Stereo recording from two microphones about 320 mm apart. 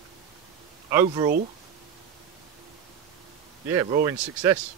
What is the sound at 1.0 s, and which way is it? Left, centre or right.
Speech, centre.